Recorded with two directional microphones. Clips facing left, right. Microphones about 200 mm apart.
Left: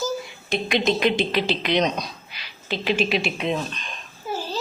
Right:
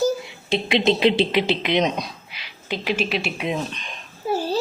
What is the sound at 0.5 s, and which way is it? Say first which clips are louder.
Speech: right 2 dB; 25° right (ahead or behind).